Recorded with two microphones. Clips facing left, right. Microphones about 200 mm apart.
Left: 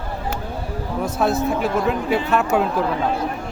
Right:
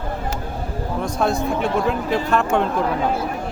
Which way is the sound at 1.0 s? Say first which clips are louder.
Left 1 dB; 5° left (ahead or behind).